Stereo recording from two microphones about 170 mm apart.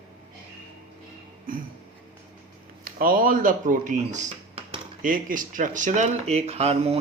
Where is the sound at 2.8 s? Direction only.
55° right (ahead or behind).